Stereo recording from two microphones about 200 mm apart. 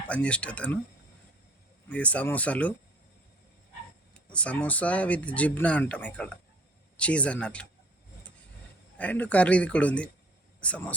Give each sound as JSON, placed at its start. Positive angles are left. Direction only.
{"t": 0.1, "sound": "speech", "side_deg": 5}
{"t": 1.9, "sound": "speech", "side_deg": 5}
{"t": 4.3, "sound": "speech", "side_deg": 5}
{"t": 9.0, "sound": "speech", "side_deg": 5}